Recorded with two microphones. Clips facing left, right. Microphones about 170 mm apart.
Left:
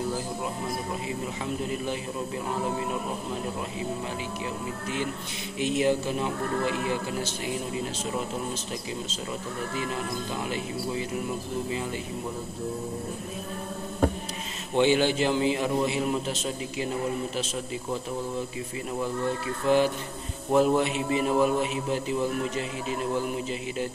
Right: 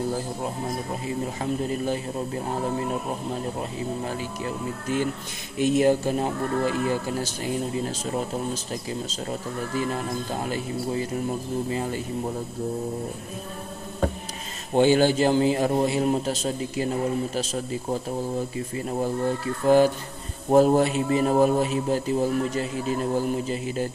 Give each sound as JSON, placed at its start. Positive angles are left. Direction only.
{"t": 5.6, "sound": "speech", "side_deg": -45}
{"t": 10.3, "sound": "speech", "side_deg": -45}
{"t": 14.7, "sound": "a man's voice", "side_deg": -40}
{"t": 19.6, "sound": "a man's voice", "side_deg": -40}